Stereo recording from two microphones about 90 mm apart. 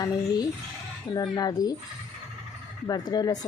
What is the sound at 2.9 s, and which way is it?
Speech, 45° left (ahead or behind).